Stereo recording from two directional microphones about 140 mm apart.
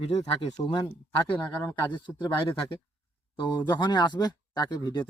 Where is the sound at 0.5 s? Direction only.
30° left (ahead or behind).